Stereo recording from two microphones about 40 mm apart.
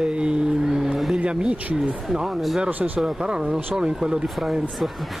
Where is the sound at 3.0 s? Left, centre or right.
Right.